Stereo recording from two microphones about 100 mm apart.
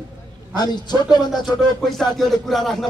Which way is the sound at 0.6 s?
45° left (ahead or behind).